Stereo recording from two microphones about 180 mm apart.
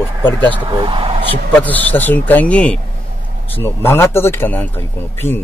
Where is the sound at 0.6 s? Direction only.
25° right (ahead or behind).